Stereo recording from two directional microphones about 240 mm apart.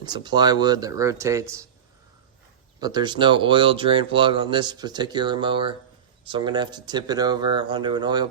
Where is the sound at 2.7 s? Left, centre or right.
Centre.